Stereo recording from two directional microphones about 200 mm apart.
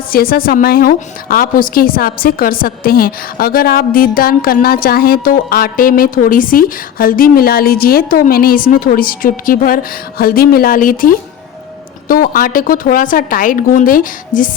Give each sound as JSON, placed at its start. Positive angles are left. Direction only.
{"t": 0.1, "sound": "a woman's voice", "side_deg": 45}